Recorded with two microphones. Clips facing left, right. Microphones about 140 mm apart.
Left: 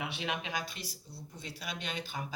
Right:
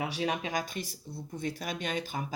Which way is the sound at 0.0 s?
40° right (ahead or behind).